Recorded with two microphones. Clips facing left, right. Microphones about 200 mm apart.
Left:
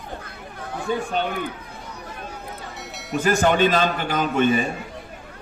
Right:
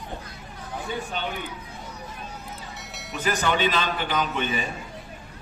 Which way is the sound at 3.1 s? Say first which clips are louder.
Left 6 dB; 45° left (ahead or behind).